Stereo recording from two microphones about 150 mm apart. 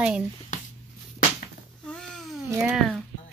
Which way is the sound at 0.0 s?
5° right (ahead or behind).